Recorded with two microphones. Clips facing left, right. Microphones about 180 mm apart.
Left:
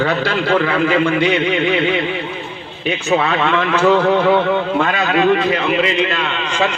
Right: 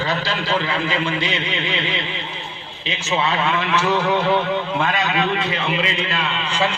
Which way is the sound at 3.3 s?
55° left (ahead or behind).